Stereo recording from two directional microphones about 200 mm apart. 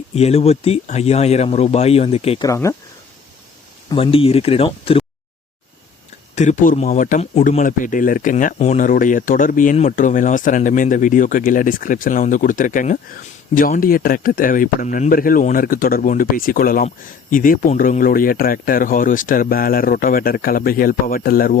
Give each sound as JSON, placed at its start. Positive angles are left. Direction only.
{"t": 0.1, "sound": "speech", "side_deg": 30}
{"t": 2.4, "sound": "speech", "side_deg": 15}
{"t": 3.8, "sound": "speech", "side_deg": 25}
{"t": 6.3, "sound": "speech", "side_deg": 35}